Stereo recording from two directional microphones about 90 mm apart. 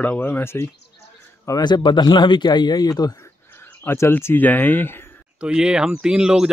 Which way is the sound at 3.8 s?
25° left (ahead or behind).